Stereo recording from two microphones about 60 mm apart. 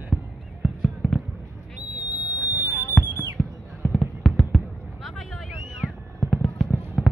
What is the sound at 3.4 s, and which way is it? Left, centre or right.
Fireworks, left.